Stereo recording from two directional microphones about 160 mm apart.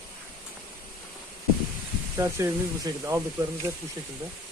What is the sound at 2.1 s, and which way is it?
Speech, 15° right (ahead or behind).